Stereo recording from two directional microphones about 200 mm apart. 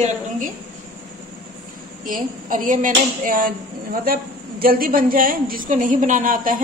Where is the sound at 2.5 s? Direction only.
40° right (ahead or behind).